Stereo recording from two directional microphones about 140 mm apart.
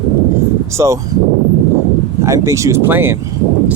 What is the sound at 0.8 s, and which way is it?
Speech, 20° right (ahead or behind).